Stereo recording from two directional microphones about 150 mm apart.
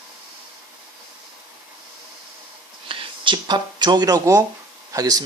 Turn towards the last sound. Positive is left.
turn(degrees=-25)  # may be behind; listen again after turning